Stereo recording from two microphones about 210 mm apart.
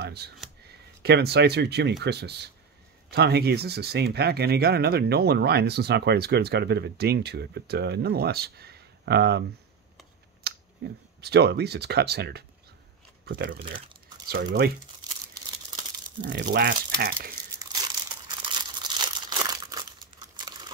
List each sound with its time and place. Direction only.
0.0 s a sound: 50° right (ahead or behind)
0.7 s speech: 50° right (ahead or behind)
10.4 s speech: 50° right (ahead or behind)
13.6 s speech: 25° right (ahead or behind)
14.3 s speech: 45° right (ahead or behind)
16.2 s speech: 50° right (ahead or behind)
18.4 s crumpling: 20° right (ahead or behind)